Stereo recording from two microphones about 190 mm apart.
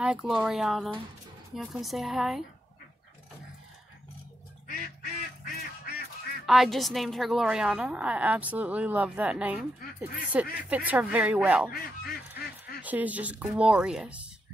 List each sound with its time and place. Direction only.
0.0 s a woman's voice: 5° right (ahead or behind)
4.6 s duck: 45° left (ahead or behind)
6.4 s a woman's voice: centre (ahead or behind)
11.7 s goose: 55° left (ahead or behind)
12.8 s speech: 10° right (ahead or behind)